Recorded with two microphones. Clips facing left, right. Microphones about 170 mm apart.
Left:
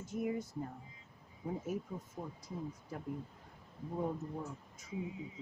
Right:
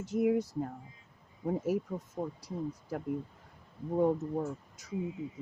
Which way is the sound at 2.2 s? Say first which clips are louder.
Right 9 dB; 60° right (ahead or behind).